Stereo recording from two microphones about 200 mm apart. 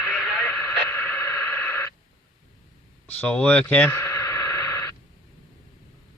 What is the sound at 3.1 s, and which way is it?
Radio, 5° left (ahead or behind).